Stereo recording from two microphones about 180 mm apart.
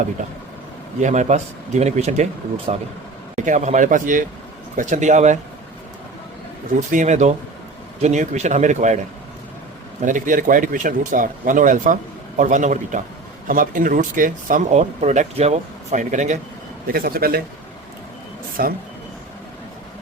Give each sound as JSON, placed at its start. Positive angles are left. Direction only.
{"t": 1.0, "sound": "speech", "side_deg": -40}
{"t": 6.7, "sound": "speech", "side_deg": -45}
{"t": 10.0, "sound": "speech", "side_deg": -45}
{"t": 16.8, "sound": "a man's voice", "side_deg": -55}
{"t": 18.6, "sound": "a man's voice", "side_deg": -55}